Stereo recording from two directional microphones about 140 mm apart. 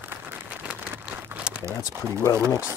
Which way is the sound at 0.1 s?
15° right (ahead or behind).